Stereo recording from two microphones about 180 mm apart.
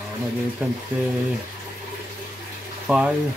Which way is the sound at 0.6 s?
10° right (ahead or behind).